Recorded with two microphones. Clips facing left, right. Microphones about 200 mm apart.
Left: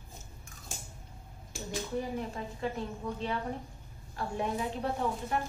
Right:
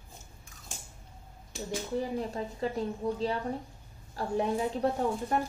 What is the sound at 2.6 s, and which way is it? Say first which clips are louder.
Speech: right 4 dB; 35° right (ahead or behind).